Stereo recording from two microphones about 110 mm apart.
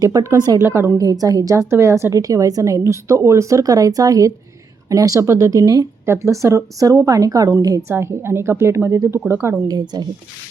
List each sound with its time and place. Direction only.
0.0 s speech: 30° right (ahead or behind)
0.6 s speech: 25° right (ahead or behind)
9.6 s speech: 40° right (ahead or behind)